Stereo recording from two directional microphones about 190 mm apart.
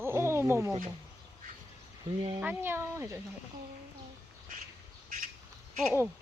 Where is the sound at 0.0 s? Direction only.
15° right (ahead or behind).